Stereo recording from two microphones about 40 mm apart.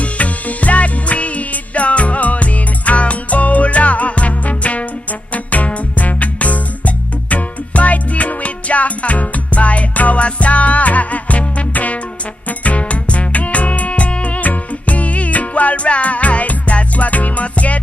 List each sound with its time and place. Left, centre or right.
0.0 s music: left